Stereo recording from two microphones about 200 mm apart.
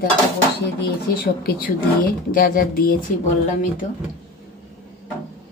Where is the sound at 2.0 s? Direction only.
45° left (ahead or behind).